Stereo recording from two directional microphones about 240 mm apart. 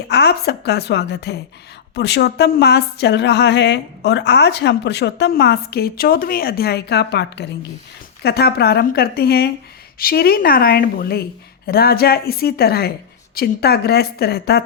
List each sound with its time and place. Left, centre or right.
0.1 s a woman's voice: left